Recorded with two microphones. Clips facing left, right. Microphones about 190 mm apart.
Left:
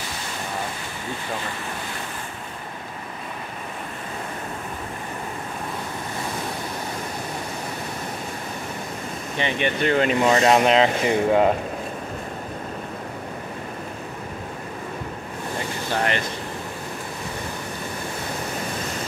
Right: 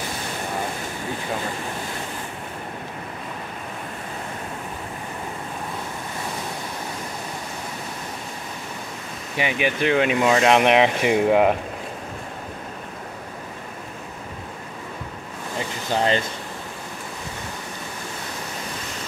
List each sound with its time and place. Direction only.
9.4 s speech: 5° right (ahead or behind)
15.9 s speech: 25° right (ahead or behind)